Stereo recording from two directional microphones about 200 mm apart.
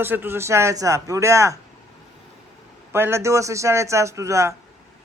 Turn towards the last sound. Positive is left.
turn(degrees=-15)  # may be behind; listen again after turning